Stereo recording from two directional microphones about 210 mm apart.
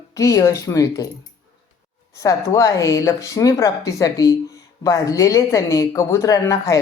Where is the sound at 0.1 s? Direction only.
15° left (ahead or behind).